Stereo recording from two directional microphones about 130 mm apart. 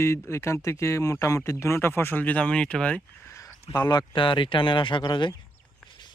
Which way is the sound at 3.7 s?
30° left (ahead or behind).